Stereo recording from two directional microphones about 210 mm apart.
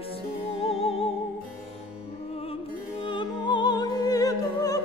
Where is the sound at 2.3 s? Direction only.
25° left (ahead or behind).